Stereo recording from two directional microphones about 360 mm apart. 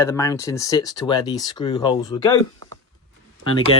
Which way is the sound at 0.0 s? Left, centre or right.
Centre.